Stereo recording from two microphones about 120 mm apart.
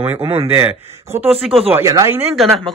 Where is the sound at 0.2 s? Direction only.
55° right (ahead or behind).